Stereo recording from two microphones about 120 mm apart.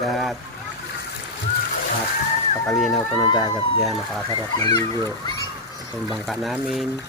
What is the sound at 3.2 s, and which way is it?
Speech, 35° left (ahead or behind).